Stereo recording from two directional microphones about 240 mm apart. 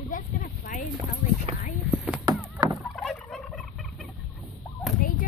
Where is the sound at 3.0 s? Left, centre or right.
Centre.